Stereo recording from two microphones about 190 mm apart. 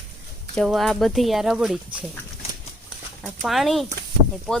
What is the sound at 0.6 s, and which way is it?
Speech, centre (ahead or behind).